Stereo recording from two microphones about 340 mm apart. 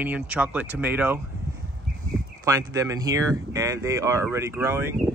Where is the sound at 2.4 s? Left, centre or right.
Centre.